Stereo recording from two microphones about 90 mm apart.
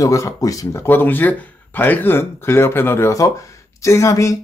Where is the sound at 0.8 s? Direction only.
20° left (ahead or behind).